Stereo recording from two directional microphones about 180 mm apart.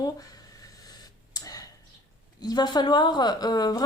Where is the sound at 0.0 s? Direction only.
20° left (ahead or behind).